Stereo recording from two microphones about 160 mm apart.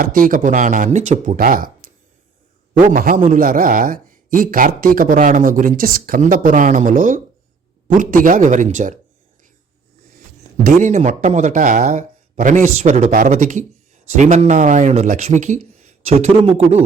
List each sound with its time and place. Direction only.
0.0 s speech: 60° right (ahead or behind)
10.8 s speech: 50° right (ahead or behind)